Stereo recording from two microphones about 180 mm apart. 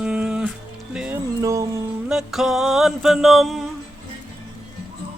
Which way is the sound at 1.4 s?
15° right (ahead or behind).